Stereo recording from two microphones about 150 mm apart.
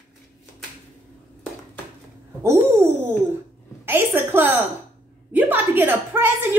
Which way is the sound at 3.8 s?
15° right (ahead or behind).